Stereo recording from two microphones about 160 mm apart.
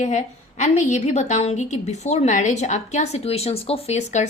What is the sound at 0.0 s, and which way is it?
A woman's voice, 45° left (ahead or behind).